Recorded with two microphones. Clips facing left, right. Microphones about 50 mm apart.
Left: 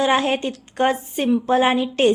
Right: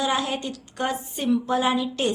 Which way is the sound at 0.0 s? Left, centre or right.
Left.